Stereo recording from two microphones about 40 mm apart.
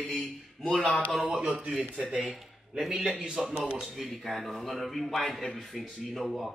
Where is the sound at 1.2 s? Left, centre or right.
Right.